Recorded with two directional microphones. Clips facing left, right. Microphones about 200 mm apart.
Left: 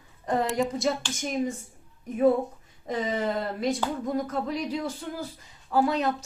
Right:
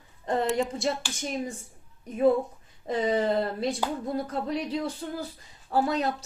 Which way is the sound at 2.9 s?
30° right (ahead or behind).